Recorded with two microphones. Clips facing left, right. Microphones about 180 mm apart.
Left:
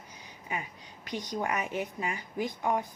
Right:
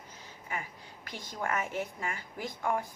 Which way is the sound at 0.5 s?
15° left (ahead or behind).